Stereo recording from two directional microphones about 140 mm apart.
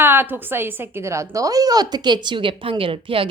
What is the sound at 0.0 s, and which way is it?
A woman's voice, 15° right (ahead or behind).